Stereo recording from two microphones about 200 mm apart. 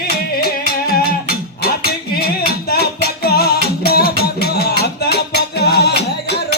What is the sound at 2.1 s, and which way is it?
Music, 50° left (ahead or behind).